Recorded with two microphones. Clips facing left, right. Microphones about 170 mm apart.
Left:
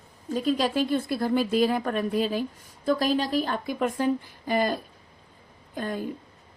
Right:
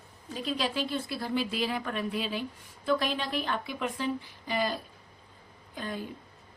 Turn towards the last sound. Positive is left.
turn(degrees=50)  # may be behind; listen again after turning